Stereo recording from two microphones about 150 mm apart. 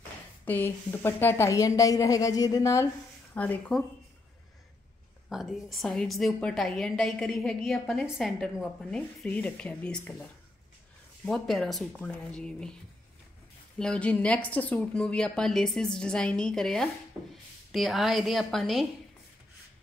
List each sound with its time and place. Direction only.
0.5 s a woman's voice: 15° left (ahead or behind)
3.3 s speech: 10° left (ahead or behind)
5.3 s a woman's voice: centre (ahead or behind)
11.2 s a woman's voice: centre (ahead or behind)
13.7 s a woman's voice: 5° left (ahead or behind)